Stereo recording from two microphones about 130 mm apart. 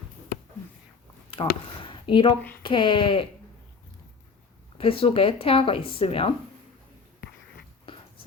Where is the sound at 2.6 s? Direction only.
40° left (ahead or behind).